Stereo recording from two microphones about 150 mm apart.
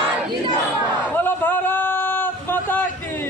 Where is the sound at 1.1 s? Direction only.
10° left (ahead or behind).